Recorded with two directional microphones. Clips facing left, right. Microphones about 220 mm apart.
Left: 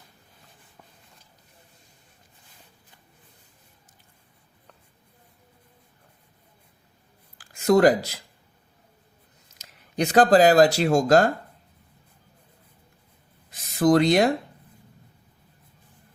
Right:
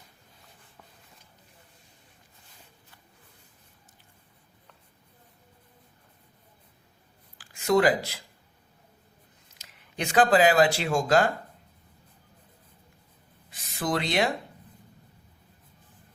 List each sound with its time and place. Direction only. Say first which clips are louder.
7.3 s speech: left 4 dB; 45° left (ahead or behind)
9.6 s speech: left 8 dB; 40° left (ahead or behind)
13.5 s a sound: left 10 dB; 45° left (ahead or behind)